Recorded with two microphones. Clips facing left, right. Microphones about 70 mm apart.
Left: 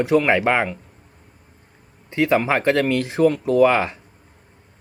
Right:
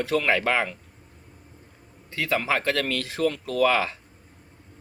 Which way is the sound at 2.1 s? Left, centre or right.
Left.